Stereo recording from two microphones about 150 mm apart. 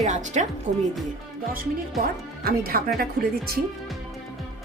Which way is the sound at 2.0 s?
80° right.